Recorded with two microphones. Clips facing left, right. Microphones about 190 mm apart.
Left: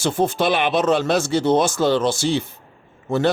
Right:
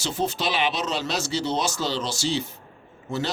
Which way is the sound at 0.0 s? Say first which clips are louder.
Left 7 dB; 55° left (ahead or behind).